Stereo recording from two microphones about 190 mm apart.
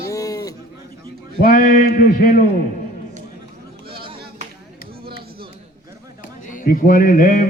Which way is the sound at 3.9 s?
25° right (ahead or behind).